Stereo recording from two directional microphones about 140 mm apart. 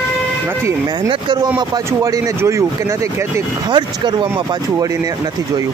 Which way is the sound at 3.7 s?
35° right (ahead or behind).